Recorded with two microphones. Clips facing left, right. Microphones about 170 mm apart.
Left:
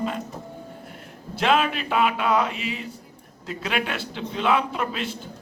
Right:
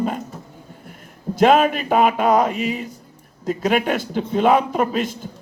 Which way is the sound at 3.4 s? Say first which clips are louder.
Right 8 dB; 45° right (ahead or behind).